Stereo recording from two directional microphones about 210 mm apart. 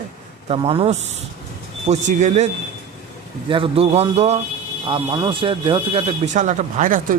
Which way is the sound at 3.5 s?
25° right (ahead or behind).